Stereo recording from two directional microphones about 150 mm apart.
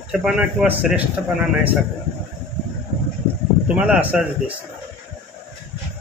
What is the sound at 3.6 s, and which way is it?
Speech, 5° right (ahead or behind).